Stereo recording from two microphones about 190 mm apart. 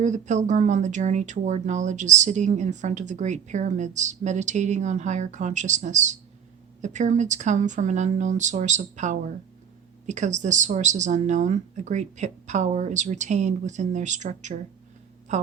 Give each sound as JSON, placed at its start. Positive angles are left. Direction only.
{"t": 0.0, "sound": "speech", "side_deg": -40}